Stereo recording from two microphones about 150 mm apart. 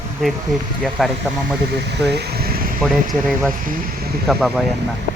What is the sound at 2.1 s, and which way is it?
Speech, 90° right.